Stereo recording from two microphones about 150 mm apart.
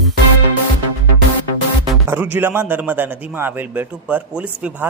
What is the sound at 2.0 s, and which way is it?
A man's voice, 15° right (ahead or behind).